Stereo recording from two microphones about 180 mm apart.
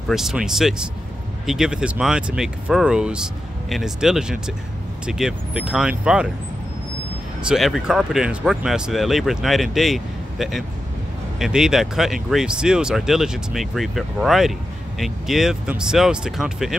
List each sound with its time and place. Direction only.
0.1 s speech: centre (ahead or behind)
7.4 s speech: centre (ahead or behind)